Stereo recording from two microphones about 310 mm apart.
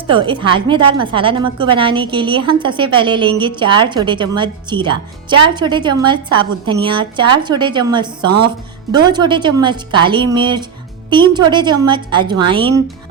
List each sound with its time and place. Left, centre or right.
0.1 s speech: centre